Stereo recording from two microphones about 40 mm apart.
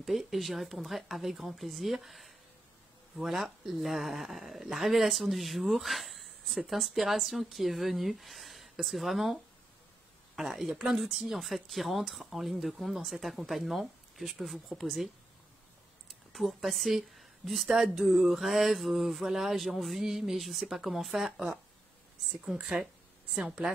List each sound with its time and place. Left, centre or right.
0.0 s a woman's voice: centre
16.1 s speech: centre
22.6 s speech: centre